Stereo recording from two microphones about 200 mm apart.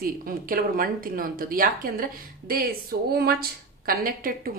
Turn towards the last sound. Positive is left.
turn(degrees=-45)  # may be behind; listen again after turning